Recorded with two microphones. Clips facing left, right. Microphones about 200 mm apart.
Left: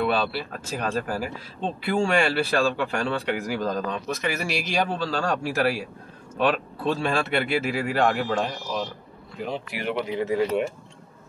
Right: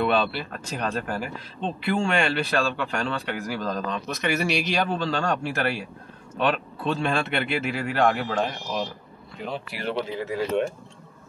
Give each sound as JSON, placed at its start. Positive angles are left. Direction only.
{"t": 0.0, "sound": "a man's voice", "side_deg": 0}
{"t": 9.5, "sound": "a man's voice", "side_deg": 15}